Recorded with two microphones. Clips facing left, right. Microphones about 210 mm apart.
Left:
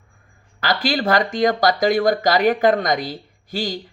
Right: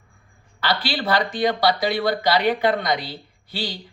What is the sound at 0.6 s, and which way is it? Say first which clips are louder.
Speech: left 4 dB; 45° left (ahead or behind).